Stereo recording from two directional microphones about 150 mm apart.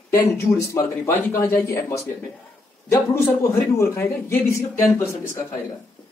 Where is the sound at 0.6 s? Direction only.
20° left (ahead or behind).